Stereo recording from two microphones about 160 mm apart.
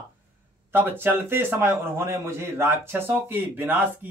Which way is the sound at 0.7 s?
15° right (ahead or behind).